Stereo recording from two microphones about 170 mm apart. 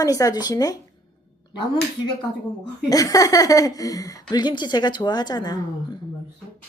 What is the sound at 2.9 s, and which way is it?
Speech, 20° left (ahead or behind).